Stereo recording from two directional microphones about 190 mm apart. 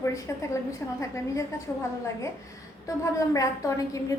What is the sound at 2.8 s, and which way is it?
A woman's voice, 15° left (ahead or behind).